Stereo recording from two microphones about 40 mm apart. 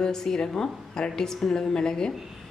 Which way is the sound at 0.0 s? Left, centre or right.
Centre.